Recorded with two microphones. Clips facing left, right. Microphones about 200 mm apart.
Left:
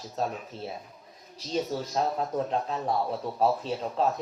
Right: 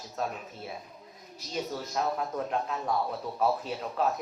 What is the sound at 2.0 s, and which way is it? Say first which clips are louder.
A man's voice: left 2 dB; 30° left (ahead or behind).